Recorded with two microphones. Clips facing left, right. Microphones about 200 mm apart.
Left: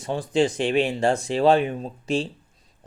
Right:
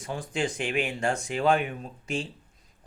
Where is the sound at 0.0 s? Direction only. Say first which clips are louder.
Left 8 dB; 25° left (ahead or behind).